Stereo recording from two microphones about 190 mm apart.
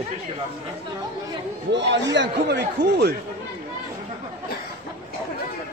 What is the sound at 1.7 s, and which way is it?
Speech, 70° right (ahead or behind).